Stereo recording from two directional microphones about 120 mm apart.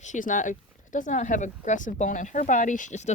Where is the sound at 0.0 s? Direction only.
90° left.